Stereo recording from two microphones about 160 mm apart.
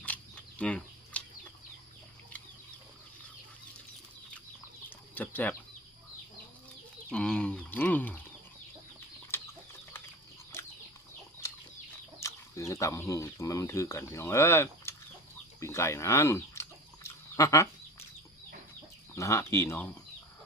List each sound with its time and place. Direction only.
0.0 s a sound: 10° left (ahead or behind)
5.1 s speech: 10° left (ahead or behind)
7.1 s speech: 5° left (ahead or behind)
12.2 s speech: 20° left (ahead or behind)
15.6 s a sound: 15° left (ahead or behind)
19.1 s speech: 15° left (ahead or behind)